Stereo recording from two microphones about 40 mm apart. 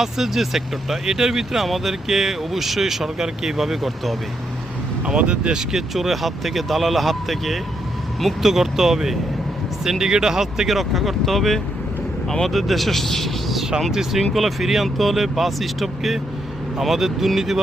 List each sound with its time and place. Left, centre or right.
0.0 s speech: centre
5.0 s speech: right
5.7 s speech: centre
13.6 s vehicle: centre
13.9 s speech: centre